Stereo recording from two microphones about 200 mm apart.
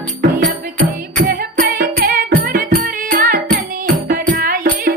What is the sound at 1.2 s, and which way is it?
Music, 45° right (ahead or behind).